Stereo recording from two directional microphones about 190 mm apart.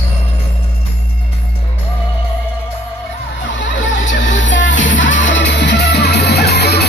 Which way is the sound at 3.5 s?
70° left (ahead or behind).